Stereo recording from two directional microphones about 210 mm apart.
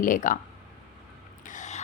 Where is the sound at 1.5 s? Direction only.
35° left (ahead or behind).